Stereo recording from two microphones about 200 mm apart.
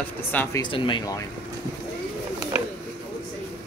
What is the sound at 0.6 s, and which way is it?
Speech, 25° left (ahead or behind).